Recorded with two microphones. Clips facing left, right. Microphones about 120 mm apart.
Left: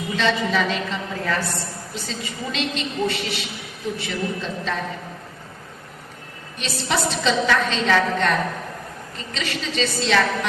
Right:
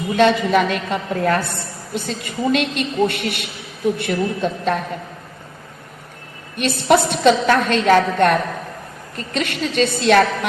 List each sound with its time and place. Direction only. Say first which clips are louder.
0.2 s a woman's voice: right 7 dB; 55° right (ahead or behind)
6.6 s a woman's voice: right 9 dB; 55° right (ahead or behind)